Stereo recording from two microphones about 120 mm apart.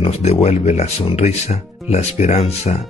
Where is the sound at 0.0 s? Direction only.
65° left (ahead or behind).